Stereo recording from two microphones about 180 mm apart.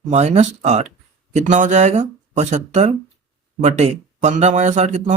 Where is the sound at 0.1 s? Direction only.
40° right (ahead or behind).